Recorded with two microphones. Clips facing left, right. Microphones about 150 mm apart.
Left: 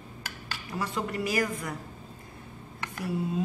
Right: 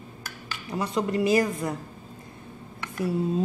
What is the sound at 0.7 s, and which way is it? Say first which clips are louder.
A woman's voice: right 6 dB; 20° right (ahead or behind).